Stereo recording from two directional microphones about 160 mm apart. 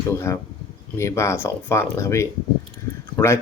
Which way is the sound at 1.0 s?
15° left (ahead or behind).